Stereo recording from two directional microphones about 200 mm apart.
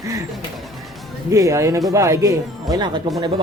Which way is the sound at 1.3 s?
15° right (ahead or behind).